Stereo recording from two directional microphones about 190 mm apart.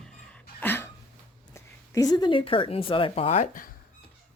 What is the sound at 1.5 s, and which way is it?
Speech, 20° left (ahead or behind).